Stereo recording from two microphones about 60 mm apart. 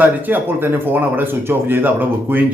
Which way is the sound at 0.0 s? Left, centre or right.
Right.